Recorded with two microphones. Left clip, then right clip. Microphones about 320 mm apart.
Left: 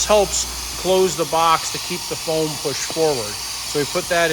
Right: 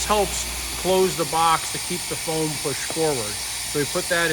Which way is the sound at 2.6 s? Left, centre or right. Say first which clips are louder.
Left 4 dB; centre.